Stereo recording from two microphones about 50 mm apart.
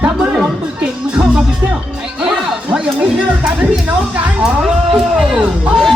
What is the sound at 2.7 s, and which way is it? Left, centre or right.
Music, centre.